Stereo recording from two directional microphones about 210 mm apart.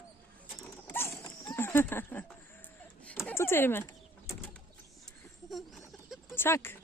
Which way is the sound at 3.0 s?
5° left (ahead or behind).